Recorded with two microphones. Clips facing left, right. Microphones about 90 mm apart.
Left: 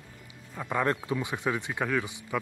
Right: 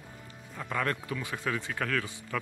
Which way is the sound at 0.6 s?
15° left (ahead or behind).